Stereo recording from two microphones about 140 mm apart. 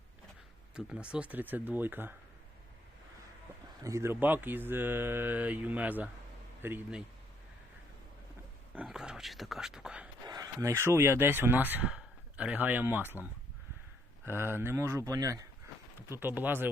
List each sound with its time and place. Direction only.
0.9 s speech: 5° right (ahead or behind)
3.8 s speech: 20° right (ahead or behind)
8.7 s speech: 5° right (ahead or behind)
10.2 s speech: 25° right (ahead or behind)
14.3 s speech: 15° right (ahead or behind)